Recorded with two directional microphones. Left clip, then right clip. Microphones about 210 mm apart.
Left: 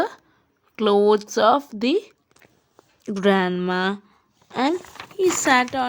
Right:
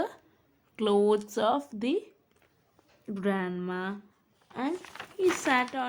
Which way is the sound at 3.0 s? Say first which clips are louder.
Left 12 dB; 50° left (ahead or behind).